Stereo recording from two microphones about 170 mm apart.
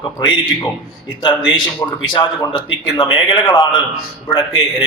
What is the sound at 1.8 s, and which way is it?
A man's voice, 20° left (ahead or behind).